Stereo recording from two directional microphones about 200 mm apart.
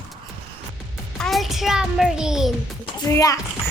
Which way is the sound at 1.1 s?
Centre (ahead or behind).